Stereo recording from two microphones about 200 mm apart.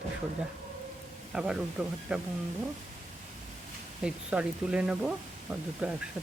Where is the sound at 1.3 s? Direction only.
5° right (ahead or behind).